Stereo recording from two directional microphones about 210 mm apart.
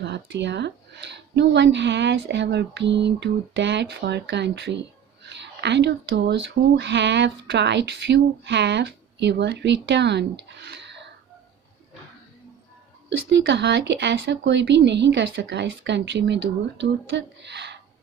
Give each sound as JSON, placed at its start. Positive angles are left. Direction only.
{"t": 0.0, "sound": "speech", "side_deg": -55}
{"t": 13.1, "sound": "speech", "side_deg": -55}